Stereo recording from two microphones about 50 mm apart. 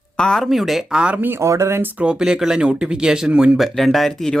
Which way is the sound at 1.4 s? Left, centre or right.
Right.